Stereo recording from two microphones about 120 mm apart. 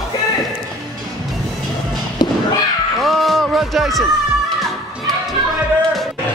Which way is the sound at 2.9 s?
Centre (ahead or behind).